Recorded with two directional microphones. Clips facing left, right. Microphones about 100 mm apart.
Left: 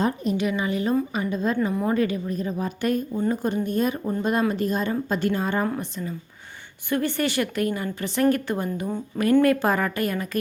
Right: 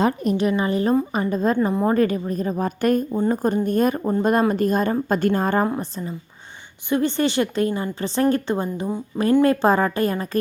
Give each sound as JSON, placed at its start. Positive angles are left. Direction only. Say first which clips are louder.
{"t": 0.3, "sound": "a woman's voice", "louder": "right 4 dB", "side_deg": -40}
{"t": 5.6, "sound": "a woman's voice", "louder": "right 3 dB", "side_deg": -25}